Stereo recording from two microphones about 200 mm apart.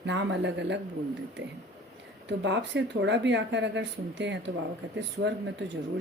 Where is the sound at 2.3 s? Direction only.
65° right (ahead or behind).